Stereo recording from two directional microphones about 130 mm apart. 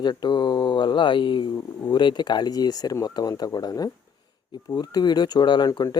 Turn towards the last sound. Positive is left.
turn(degrees=30)  # may be behind; listen again after turning